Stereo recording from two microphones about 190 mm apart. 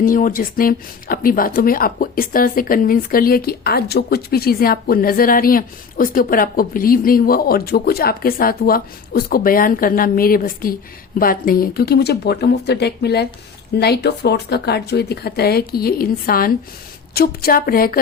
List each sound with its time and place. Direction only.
0.0 s speech: 45° left (ahead or behind)